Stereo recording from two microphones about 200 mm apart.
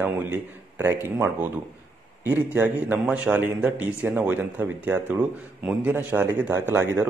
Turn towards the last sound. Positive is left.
turn(degrees=-10)  # may be behind; listen again after turning